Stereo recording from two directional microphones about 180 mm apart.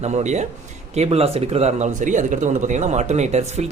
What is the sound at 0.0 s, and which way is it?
Speech, 40° right (ahead or behind).